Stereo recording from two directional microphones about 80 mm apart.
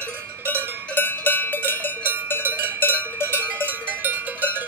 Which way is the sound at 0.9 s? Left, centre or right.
Left.